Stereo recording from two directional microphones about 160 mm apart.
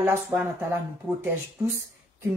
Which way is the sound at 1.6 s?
15° right (ahead or behind).